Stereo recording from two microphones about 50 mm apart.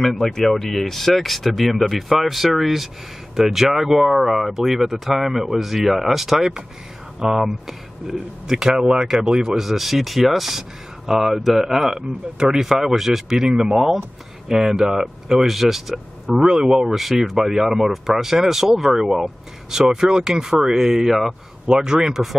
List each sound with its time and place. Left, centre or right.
0.0 s speech: centre